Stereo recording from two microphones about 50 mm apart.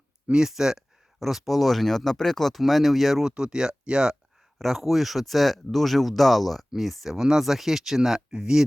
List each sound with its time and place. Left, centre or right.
0.3 s speech: centre
3.2 s speech: centre
4.5 s speech: centre